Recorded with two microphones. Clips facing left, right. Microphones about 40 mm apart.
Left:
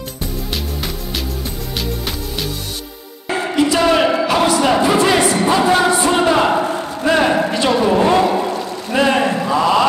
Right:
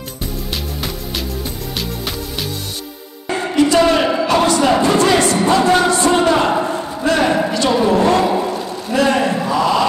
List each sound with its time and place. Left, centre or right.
3.3 s music: centre
7.1 s speech: left
7.3 s a sound: centre
7.7 s speech: centre
8.2 s music: centre
8.9 s a sound: left